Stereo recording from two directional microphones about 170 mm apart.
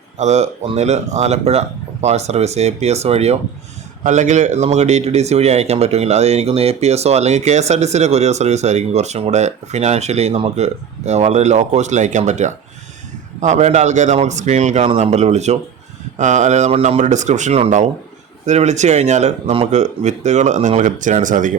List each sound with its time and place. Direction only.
0.2 s speech: 40° right (ahead or behind)